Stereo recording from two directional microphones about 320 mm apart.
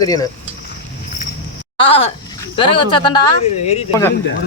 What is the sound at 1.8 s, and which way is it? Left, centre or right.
Speech, centre.